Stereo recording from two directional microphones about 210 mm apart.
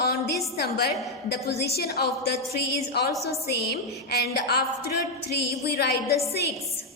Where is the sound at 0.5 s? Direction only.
50° left (ahead or behind).